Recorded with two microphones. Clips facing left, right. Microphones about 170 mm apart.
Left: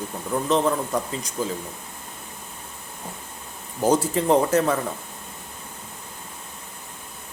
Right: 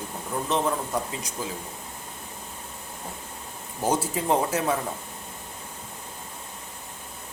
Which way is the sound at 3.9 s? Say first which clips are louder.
Left 5 dB; 5° right (ahead or behind).